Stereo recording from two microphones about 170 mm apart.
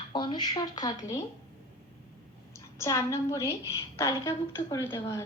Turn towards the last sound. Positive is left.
turn(degrees=15)  # may be behind; listen again after turning